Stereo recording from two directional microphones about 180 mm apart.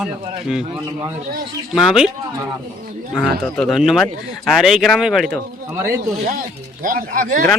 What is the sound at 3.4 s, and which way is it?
Speech, centre (ahead or behind).